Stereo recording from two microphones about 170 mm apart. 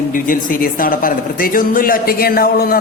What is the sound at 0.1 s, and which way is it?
A man's voice, 55° left (ahead or behind).